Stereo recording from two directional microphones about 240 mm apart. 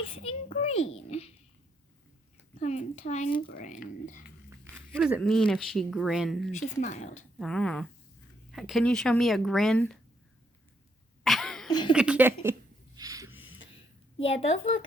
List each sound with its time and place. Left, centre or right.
0.0 s a sound: left
2.6 s speech: left
4.9 s speech: centre
6.5 s speech: left
7.3 s speech: centre
11.2 s cough: centre
11.7 s speech: centre
11.9 s speech: centre
13.0 s a sound: centre
13.3 s a sound: left